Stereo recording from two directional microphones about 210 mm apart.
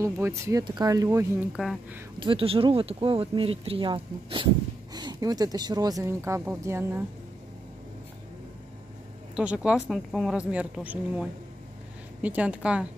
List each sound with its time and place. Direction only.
0.0 s speech: 15° right (ahead or behind)
1.6 s speech: 5° right (ahead or behind)
2.1 s speech: 25° right (ahead or behind)
9.3 s speech: 5° right (ahead or behind)